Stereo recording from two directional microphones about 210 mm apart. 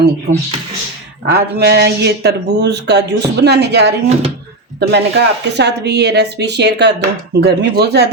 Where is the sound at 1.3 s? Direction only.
50° right (ahead or behind).